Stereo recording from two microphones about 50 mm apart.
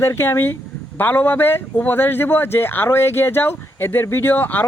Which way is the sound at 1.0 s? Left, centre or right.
Left.